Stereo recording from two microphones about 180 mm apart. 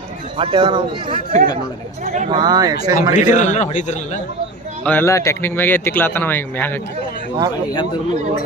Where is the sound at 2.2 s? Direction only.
25° right (ahead or behind).